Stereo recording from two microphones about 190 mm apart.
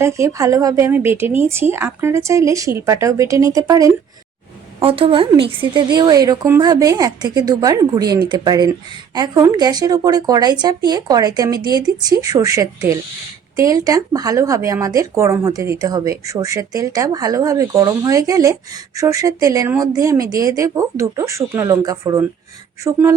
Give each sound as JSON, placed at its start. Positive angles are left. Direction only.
{"t": 0.0, "sound": "speech", "side_deg": -15}
{"t": 4.8, "sound": "speech", "side_deg": -30}